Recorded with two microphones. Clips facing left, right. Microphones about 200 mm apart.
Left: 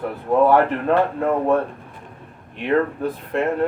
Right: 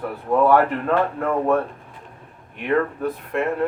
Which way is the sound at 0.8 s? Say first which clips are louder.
Left 2 dB; 30° left (ahead or behind).